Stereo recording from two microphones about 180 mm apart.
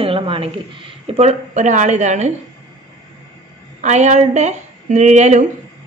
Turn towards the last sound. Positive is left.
turn(degrees=-40)  # may be behind; listen again after turning